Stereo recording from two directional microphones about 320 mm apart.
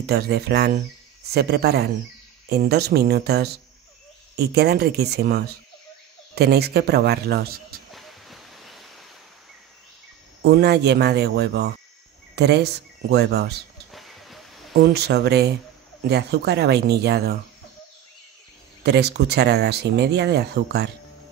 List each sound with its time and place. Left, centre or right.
0.0 s speech: right
7.9 s waves: centre
10.4 s speech: right
13.9 s a sound: centre
14.7 s speech: right
18.9 s speech: right